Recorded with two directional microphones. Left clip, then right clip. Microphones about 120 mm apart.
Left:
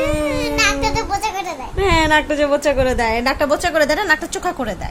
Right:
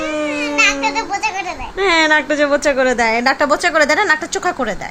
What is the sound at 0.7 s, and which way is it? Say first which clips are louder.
Speech: right 1 dB; 35° left (ahead or behind).